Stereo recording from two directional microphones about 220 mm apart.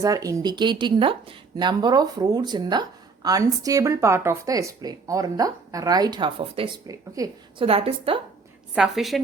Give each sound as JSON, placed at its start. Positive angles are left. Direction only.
{"t": 0.0, "sound": "speech", "side_deg": -15}
{"t": 8.7, "sound": "a woman's voice", "side_deg": 0}